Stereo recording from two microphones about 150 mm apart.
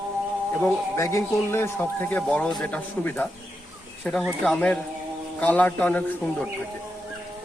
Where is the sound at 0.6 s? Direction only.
20° left (ahead or behind).